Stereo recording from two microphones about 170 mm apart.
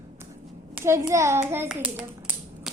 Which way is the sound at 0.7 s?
15° right (ahead or behind).